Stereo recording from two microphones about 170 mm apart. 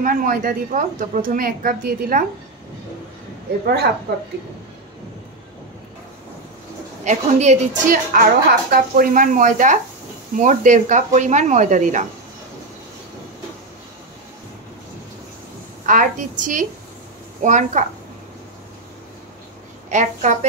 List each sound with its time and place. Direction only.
0.0 s a woman's voice: 55° right (ahead or behind)
3.6 s a woman's voice: 70° right (ahead or behind)
7.1 s a woman's voice: 40° right (ahead or behind)
7.9 s a woman's voice: 55° right (ahead or behind)
15.8 s a woman's voice: 50° right (ahead or behind)
19.9 s a woman's voice: 45° right (ahead or behind)